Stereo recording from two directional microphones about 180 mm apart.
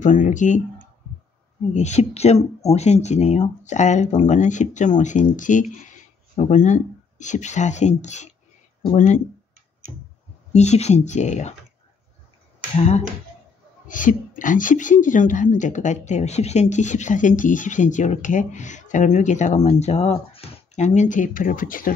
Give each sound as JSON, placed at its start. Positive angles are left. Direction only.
{"t": 0.0, "sound": "speech", "side_deg": 45}
{"t": 1.7, "sound": "speech", "side_deg": 40}
{"t": 10.5, "sound": "speech", "side_deg": 40}
{"t": 12.7, "sound": "speech", "side_deg": 35}